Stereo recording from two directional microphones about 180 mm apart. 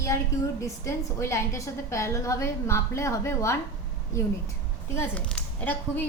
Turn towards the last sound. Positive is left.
turn(degrees=10)  # may be behind; listen again after turning